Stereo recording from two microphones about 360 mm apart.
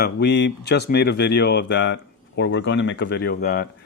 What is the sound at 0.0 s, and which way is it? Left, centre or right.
Speech, left.